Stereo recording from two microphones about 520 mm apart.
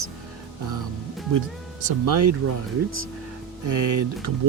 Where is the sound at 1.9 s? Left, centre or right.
Right.